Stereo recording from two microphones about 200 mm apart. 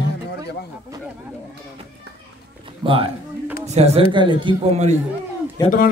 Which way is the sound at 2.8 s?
25° right (ahead or behind).